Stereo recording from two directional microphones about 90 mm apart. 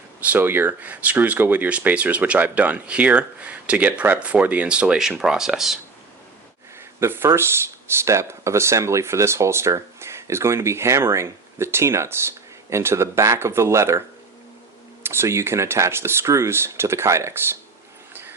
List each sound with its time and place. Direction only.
0.2 s speech: 20° right (ahead or behind); by 5.8 s 5° right (ahead or behind)
7.0 s speech: 30° right (ahead or behind)
15.0 s speech: 25° right (ahead or behind)
18.1 s a sound: 25° right (ahead or behind)